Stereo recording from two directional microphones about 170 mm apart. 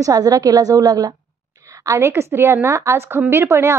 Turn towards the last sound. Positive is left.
turn(degrees=-15)  # may be behind; listen again after turning